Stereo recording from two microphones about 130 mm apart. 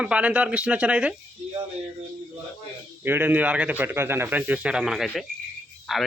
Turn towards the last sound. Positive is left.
turn(degrees=0)  # may be behind; listen again after turning